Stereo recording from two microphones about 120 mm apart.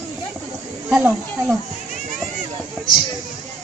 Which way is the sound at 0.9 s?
5° right (ahead or behind).